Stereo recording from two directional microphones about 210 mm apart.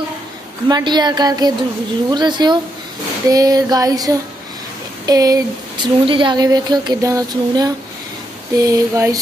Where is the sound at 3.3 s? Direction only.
15° right (ahead or behind).